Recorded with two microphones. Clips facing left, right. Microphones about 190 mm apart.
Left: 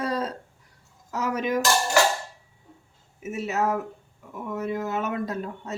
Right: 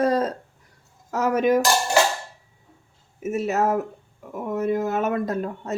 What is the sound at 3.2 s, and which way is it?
Speech, 45° right (ahead or behind).